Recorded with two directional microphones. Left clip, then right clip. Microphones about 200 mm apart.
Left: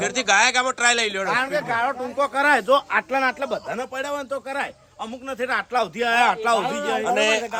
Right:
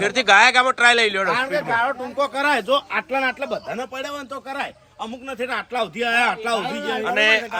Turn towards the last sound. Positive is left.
turn(degrees=20)  # may be behind; listen again after turning